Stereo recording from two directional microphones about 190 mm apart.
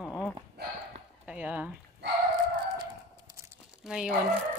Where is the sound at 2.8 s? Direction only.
20° right (ahead or behind).